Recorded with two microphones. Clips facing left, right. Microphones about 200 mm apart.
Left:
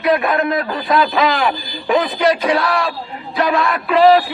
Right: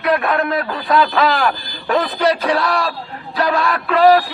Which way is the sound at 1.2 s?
15° left (ahead or behind).